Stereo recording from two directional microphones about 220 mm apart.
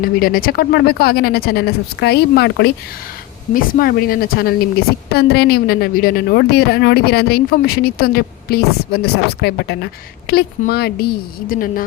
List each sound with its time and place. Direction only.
0.0 s a woman's voice: 40° left (ahead or behind)